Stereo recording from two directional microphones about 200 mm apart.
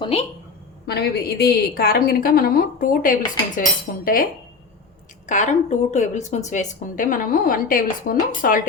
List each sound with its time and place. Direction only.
0.0 s a woman's voice: 30° left (ahead or behind)
0.9 s a woman's voice: 50° left (ahead or behind)
5.2 s a woman's voice: 35° left (ahead or behind)